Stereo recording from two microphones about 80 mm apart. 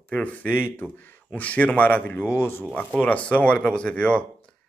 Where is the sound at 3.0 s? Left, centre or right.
Centre.